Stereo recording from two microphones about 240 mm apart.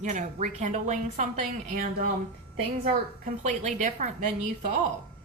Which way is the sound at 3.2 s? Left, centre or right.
Right.